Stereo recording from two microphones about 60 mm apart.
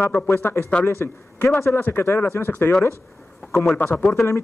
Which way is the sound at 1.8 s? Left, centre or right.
Left.